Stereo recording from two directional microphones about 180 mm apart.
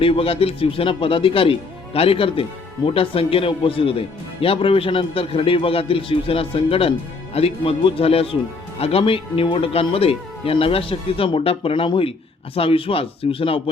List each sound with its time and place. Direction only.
0.0 s speech: 30° left (ahead or behind)